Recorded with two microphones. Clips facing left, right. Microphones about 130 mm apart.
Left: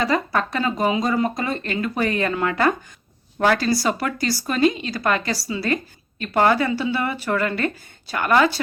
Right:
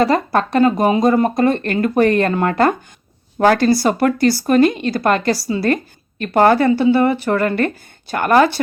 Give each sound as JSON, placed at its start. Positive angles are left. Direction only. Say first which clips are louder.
{"t": 0.3, "sound": "speech", "louder": "right 8 dB", "side_deg": -50}
{"t": 3.4, "sound": "speech", "louder": "right 6 dB", "side_deg": -35}
{"t": 3.8, "sound": "a woman's voice", "louder": "right 8 dB", "side_deg": -55}
{"t": 6.3, "sound": "speech", "louder": "right 6 dB", "side_deg": -40}